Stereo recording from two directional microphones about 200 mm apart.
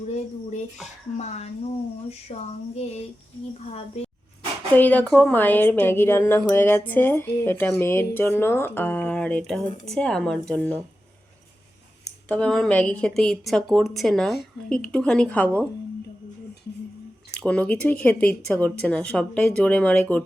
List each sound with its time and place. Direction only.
1.1 s speech: 35° left (ahead or behind)
4.7 s a woman's voice: 10° left (ahead or behind)
12.3 s a woman's voice: 5° left (ahead or behind)
17.4 s a woman's voice: 5° left (ahead or behind)